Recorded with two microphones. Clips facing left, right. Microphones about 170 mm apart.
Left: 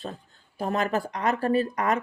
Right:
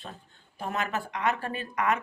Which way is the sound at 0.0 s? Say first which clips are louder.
Left 7 dB; 35° left (ahead or behind).